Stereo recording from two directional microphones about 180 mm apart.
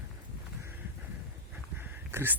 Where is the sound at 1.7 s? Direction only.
10° right (ahead or behind).